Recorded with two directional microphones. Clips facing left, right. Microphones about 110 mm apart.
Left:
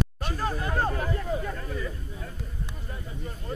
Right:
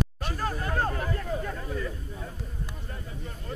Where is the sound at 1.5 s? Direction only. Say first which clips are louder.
Even; 5° right (ahead or behind).